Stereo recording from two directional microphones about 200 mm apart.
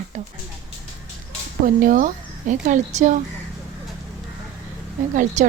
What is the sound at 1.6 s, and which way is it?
Speech, 40° right (ahead or behind).